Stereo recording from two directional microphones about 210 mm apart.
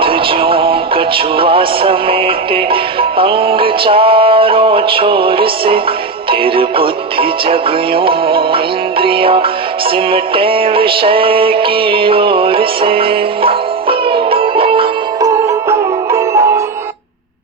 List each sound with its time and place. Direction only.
0.0 s music: 25° right (ahead or behind)
16.1 s music: 15° right (ahead or behind)